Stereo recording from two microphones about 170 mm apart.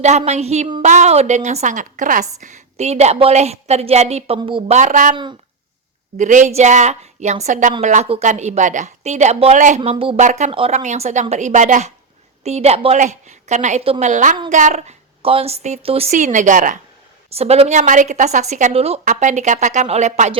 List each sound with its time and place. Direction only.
0.0 s a woman's voice: 40° right (ahead or behind)
4.7 s a woman's voice: 45° right (ahead or behind)
5.1 s speech: 25° right (ahead or behind)
6.1 s a woman's voice: 45° right (ahead or behind)
10.2 s a woman's voice: 45° right (ahead or behind)
17.2 s a woman's voice: 35° right (ahead or behind)